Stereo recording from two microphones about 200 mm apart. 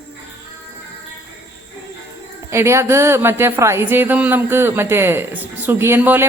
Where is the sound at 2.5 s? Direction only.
15° right (ahead or behind).